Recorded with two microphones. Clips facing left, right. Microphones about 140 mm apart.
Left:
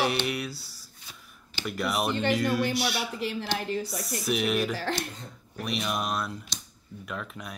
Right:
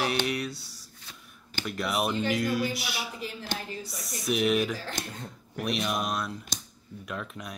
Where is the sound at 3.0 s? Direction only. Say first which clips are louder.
Left 5 dB; 75° left (ahead or behind).